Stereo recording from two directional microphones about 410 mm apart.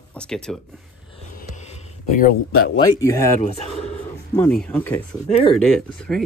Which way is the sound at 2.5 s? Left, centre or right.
Left.